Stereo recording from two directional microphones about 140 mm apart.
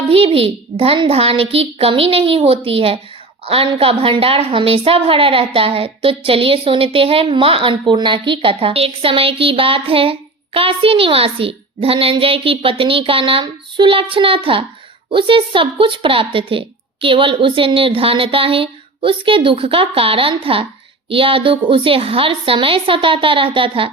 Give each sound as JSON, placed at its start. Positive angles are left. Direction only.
{"t": 0.1, "sound": "a child's voice", "side_deg": -40}